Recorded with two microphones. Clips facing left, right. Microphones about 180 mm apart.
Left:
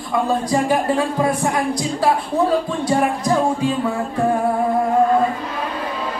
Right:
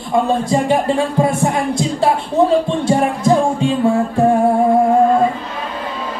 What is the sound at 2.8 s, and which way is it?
Music, 25° right (ahead or behind).